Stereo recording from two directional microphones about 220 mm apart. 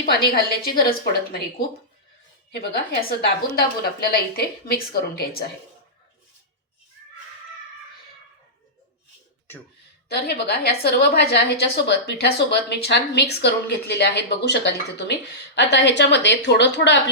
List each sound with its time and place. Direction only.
0.0 s a woman's voice: 45° left (ahead or behind)
10.2 s a woman's voice: 50° left (ahead or behind)